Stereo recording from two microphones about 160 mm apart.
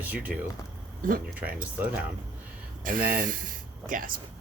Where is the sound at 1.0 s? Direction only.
60° right (ahead or behind).